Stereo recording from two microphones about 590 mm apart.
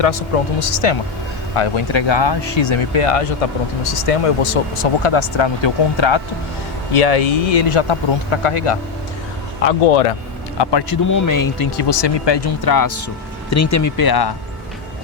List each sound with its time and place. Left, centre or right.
0.6 s speech: left
6.9 s speech: left
7.7 s speech: left
9.8 s speech: left
10.6 s speech: left
11.0 s speech: left